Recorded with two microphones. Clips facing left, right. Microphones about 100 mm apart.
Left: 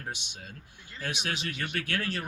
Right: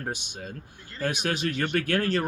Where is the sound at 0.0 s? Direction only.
45° right (ahead or behind).